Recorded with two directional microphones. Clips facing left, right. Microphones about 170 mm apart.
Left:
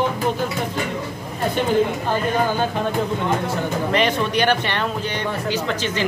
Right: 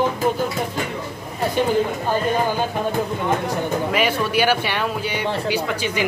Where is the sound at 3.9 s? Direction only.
5° right (ahead or behind).